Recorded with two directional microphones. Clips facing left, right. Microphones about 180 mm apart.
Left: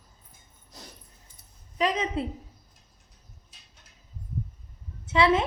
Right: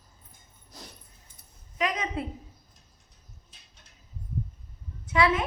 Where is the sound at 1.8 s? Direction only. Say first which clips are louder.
Left 3 dB; 30° left (ahead or behind).